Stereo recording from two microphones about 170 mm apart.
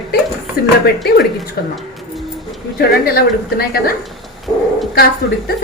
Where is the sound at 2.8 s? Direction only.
65° left (ahead or behind).